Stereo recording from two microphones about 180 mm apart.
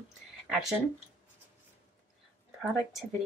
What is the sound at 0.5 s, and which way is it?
Speech, centre (ahead or behind).